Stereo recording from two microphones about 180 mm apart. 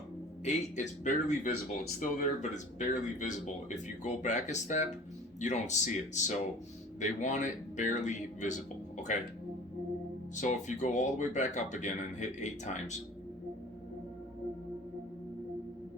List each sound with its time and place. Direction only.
0.4 s speech: 40° left (ahead or behind)
10.3 s speech: 40° left (ahead or behind)